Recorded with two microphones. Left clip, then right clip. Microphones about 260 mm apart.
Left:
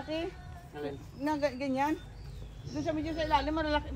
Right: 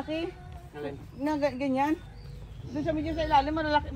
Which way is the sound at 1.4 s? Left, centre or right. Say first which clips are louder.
Right 4 dB; right.